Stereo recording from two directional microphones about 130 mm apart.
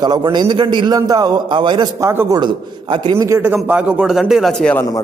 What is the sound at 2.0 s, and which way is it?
Speech, 20° right (ahead or behind).